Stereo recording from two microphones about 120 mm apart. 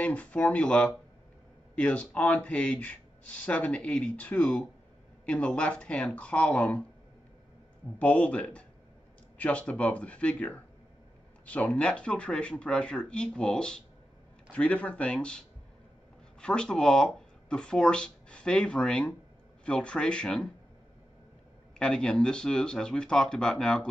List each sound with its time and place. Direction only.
0.0 s speech: 10° left (ahead or behind)
8.0 s speech: 10° left (ahead or behind)
21.7 s speech: 5° left (ahead or behind)